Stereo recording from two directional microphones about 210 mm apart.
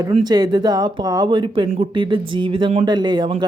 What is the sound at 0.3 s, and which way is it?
Speech, 20° right (ahead or behind).